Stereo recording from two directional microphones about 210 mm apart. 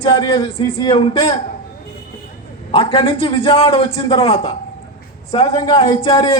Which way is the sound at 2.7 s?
25° left (ahead or behind).